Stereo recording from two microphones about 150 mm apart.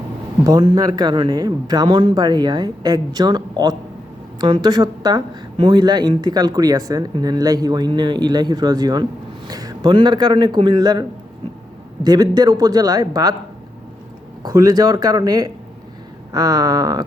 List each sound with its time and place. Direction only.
0.4 s speech: 30° right (ahead or behind)
12.0 s speech: 25° right (ahead or behind)
14.4 s speech: 25° right (ahead or behind)